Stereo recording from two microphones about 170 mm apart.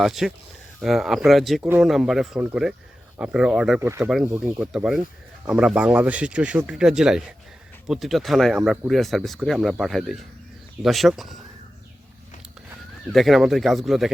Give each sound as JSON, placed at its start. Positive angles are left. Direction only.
{"t": 0.0, "sound": "speech", "side_deg": 0}
{"t": 3.8, "sound": "speech", "side_deg": -15}
{"t": 4.1, "sound": "speech", "side_deg": -5}
{"t": 13.1, "sound": "speech", "side_deg": 0}